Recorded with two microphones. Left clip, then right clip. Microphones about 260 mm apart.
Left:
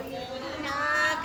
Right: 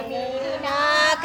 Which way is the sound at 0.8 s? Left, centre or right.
Right.